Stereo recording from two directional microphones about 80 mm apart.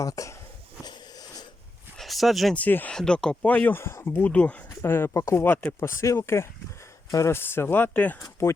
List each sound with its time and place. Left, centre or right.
0.0 s speech: left
0.9 s wheeze: left
2.0 s a sound: centre
2.6 s speech: left
2.9 s speech: centre
3.4 s speech: left
4.8 s speech: left
7.1 s speech: left
7.3 s speech: left
8.2 s speech: left